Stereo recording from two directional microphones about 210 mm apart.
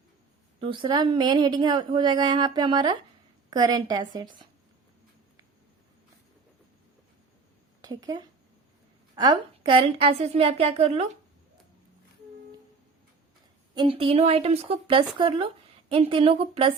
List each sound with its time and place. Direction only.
0.6 s a woman's voice: 25° right (ahead or behind)
7.8 s a woman's voice: 15° right (ahead or behind)
13.7 s a woman's voice: 25° right (ahead or behind)